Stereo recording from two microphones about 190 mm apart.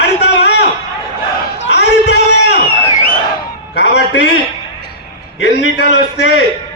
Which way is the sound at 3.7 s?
60° left (ahead or behind).